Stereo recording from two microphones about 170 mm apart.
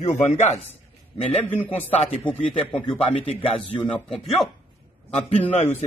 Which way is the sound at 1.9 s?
35° left (ahead or behind).